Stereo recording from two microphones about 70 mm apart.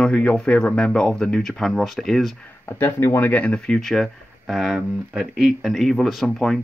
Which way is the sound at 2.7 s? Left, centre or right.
Left.